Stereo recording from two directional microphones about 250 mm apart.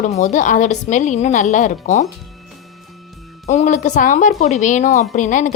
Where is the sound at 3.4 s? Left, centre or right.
Left.